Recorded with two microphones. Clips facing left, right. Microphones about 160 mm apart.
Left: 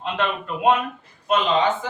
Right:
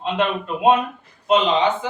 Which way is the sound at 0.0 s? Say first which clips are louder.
Right 3 dB; 15° right (ahead or behind).